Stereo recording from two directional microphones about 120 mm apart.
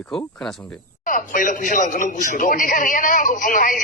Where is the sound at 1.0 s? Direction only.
90° left.